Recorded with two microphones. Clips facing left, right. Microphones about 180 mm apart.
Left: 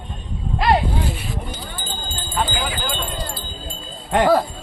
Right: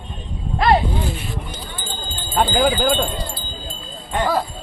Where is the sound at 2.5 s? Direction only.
50° right (ahead or behind).